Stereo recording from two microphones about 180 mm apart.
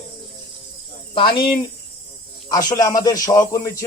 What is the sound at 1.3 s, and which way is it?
Speech, 55° left (ahead or behind).